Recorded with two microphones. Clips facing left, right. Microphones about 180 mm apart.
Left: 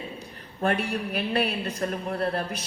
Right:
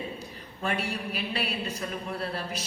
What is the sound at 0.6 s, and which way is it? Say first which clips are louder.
A man's voice: left 5 dB; 55° left (ahead or behind).